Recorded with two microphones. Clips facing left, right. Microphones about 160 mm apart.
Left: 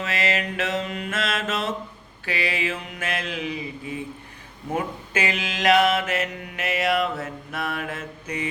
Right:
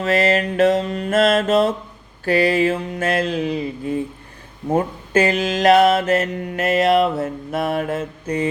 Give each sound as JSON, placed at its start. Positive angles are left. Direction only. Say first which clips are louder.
{"t": 0.0, "sound": "mantra", "louder": "right 9 dB", "side_deg": -40}
{"t": 3.5, "sound": "speech", "louder": "right 9 dB", "side_deg": -50}
{"t": 4.7, "sound": "mantra", "louder": "right 9 dB", "side_deg": -40}